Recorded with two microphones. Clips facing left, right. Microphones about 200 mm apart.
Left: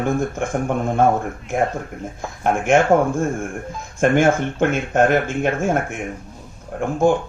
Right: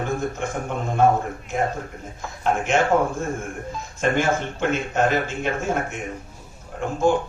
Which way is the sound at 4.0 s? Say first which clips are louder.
Left 6 dB; 50° left (ahead or behind).